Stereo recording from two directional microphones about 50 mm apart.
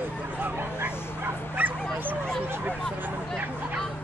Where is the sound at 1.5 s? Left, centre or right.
Right.